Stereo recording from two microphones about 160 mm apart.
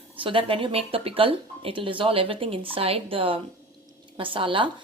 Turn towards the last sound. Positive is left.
turn(degrees=-35)  # may be behind; listen again after turning